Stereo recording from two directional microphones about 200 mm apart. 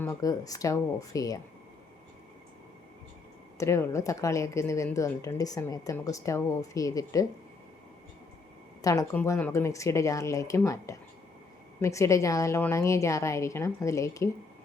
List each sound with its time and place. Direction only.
0.0 s speech: 15° left (ahead or behind)
3.6 s speech: 15° left (ahead or behind)
8.8 s speech: 15° left (ahead or behind)